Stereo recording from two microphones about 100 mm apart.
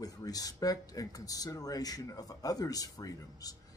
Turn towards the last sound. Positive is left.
turn(degrees=40)  # may be behind; listen again after turning